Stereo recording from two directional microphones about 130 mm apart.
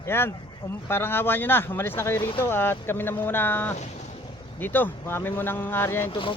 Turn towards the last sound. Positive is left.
turn(degrees=40)  # may be behind; listen again after turning